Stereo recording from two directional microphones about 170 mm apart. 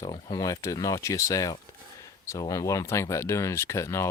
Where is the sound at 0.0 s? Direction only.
25° left (ahead or behind).